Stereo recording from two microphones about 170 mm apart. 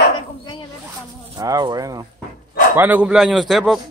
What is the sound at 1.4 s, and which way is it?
Speech, 20° right (ahead or behind).